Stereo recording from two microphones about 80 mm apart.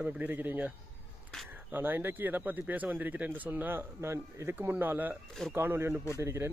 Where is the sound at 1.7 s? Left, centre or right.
Right.